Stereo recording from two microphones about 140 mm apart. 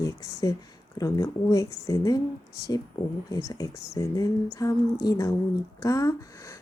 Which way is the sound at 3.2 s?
25° left (ahead or behind).